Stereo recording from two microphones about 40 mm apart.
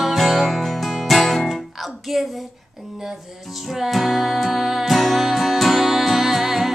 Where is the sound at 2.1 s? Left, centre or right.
Centre.